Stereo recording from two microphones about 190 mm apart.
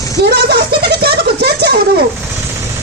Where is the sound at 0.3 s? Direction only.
60° right (ahead or behind).